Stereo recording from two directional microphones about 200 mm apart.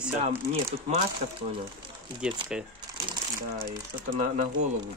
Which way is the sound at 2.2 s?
5° right (ahead or behind).